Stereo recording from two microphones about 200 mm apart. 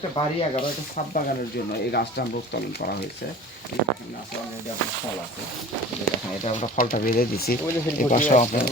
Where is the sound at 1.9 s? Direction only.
55° left (ahead or behind).